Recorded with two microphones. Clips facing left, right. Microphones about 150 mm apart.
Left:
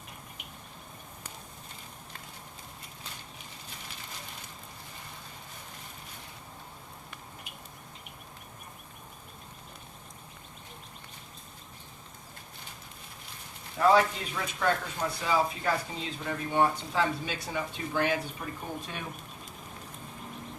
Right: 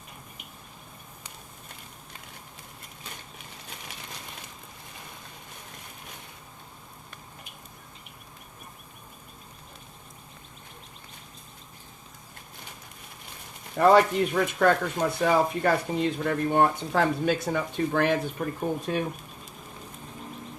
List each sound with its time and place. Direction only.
13.7 s speech: 60° right (ahead or behind)
18.9 s speech: 45° right (ahead or behind)